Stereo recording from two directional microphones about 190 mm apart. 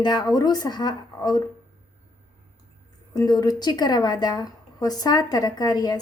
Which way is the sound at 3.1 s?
20° left (ahead or behind).